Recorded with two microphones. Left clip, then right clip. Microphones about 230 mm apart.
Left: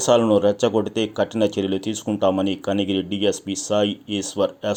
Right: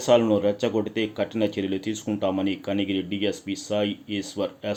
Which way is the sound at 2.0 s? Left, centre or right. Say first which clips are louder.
Left 7 dB; left.